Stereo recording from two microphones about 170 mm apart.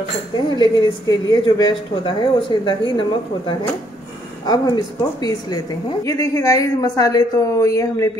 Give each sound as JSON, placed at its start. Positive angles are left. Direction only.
{"t": 0.6, "sound": "a woman's voice", "side_deg": 25}